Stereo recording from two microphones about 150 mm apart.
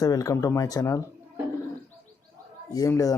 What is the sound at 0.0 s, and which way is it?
Speech, 25° left (ahead or behind).